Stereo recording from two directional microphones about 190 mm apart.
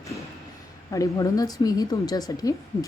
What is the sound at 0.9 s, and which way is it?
Speech, 15° left (ahead or behind).